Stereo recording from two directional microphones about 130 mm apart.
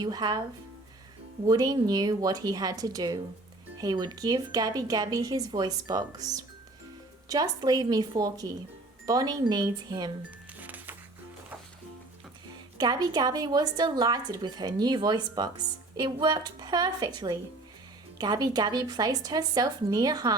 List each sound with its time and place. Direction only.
0.0 s speech: 30° right (ahead or behind)
1.5 s speech: 30° right (ahead or behind)
10.6 s music: 15° right (ahead or behind)
12.7 s speech: 35° right (ahead or behind)